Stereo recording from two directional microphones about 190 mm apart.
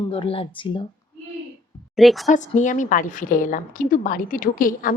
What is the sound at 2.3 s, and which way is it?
Speech, 40° left (ahead or behind).